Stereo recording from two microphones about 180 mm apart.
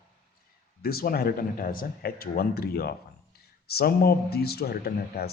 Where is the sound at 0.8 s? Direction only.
55° left (ahead or behind).